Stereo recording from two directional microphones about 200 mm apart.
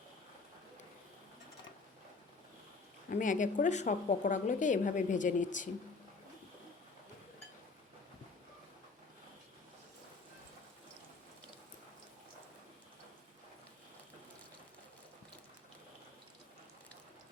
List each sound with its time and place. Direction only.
3.1 s a woman's voice: 40° left (ahead or behind)